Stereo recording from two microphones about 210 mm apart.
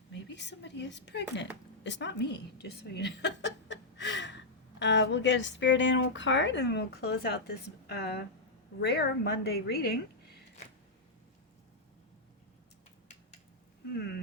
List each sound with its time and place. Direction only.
0.1 s a woman's voice: 55° left (ahead or behind)